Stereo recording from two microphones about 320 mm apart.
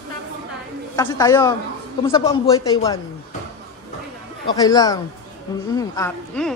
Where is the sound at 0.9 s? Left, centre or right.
Centre.